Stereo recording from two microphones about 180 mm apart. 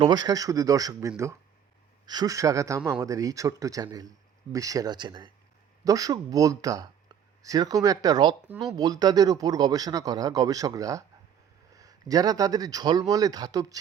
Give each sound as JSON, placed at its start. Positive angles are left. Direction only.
{"t": 0.0, "sound": "speech", "side_deg": -25}